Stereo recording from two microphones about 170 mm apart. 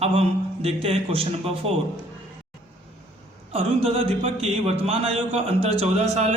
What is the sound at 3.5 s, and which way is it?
Speech, 35° right (ahead or behind).